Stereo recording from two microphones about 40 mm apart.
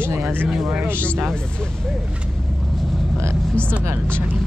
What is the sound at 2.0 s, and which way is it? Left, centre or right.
Speech, right.